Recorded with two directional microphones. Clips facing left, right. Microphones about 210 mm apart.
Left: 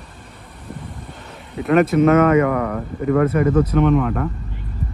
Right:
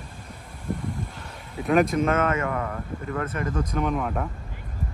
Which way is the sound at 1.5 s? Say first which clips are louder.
Left 5 dB; centre (ahead or behind).